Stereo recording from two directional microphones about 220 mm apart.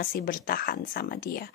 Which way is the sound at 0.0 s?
40° left (ahead or behind).